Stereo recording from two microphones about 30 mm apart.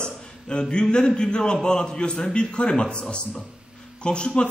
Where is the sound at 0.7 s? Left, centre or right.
Left.